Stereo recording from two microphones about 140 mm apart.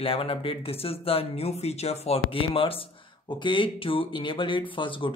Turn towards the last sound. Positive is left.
turn(degrees=35)  # may be behind; listen again after turning